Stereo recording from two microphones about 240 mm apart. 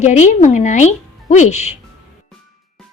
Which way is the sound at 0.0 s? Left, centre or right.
Left.